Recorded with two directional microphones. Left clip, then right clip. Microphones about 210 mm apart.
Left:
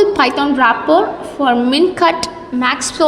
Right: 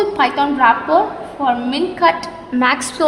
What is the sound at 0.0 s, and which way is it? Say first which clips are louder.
A woman's voice: left 3 dB; 20° left (ahead or behind).